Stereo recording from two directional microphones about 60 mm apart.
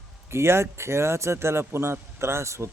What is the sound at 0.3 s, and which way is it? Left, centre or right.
Speech, right.